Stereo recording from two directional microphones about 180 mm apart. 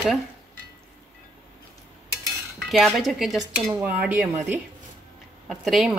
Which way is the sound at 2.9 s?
Centre (ahead or behind).